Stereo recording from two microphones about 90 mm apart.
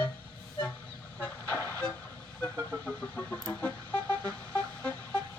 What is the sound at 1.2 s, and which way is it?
Vehicle, 25° left (ahead or behind).